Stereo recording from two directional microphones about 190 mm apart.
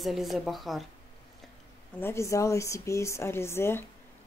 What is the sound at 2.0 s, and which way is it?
Speech, 15° left (ahead or behind).